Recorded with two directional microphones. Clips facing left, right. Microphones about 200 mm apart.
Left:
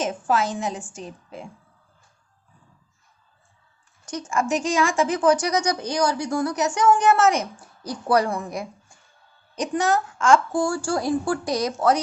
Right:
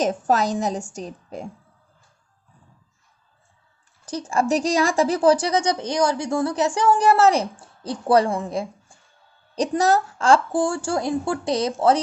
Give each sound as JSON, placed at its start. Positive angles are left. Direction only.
{"t": 0.0, "sound": "a woman's voice", "side_deg": -40}
{"t": 4.0, "sound": "a woman's voice", "side_deg": -35}